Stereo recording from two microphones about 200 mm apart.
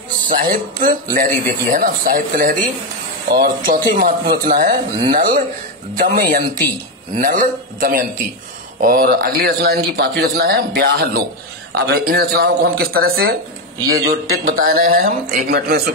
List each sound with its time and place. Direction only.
0.3 s speech: 40° right (ahead or behind)
14.4 s speech: 45° right (ahead or behind)